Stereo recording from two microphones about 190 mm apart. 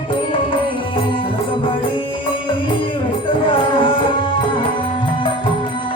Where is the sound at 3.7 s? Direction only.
25° left (ahead or behind).